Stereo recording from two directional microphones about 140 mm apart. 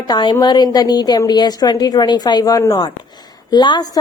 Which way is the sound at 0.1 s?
30° left (ahead or behind).